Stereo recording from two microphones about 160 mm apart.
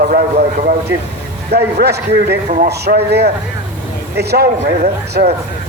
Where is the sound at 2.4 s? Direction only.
55° right (ahead or behind).